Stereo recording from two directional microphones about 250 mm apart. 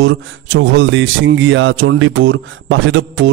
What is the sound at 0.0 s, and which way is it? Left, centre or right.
Speech, right.